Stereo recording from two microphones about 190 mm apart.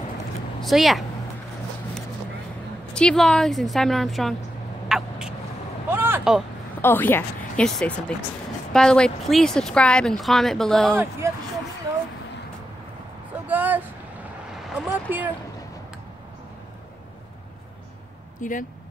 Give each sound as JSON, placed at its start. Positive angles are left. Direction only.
{"t": 0.6, "sound": "speech", "side_deg": 0}
{"t": 2.9, "sound": "speech", "side_deg": 5}
{"t": 4.8, "sound": "a sound", "side_deg": 0}
{"t": 5.9, "sound": "vehicle", "side_deg": -10}
{"t": 6.8, "sound": "speech", "side_deg": 10}
{"t": 11.0, "sound": "speech", "side_deg": -15}
{"t": 13.5, "sound": "speech", "side_deg": -10}
{"t": 14.9, "sound": "speech", "side_deg": -10}
{"t": 18.4, "sound": "speech", "side_deg": 45}